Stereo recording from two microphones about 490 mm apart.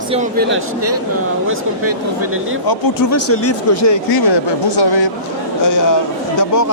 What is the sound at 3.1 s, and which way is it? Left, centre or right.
Speech, left.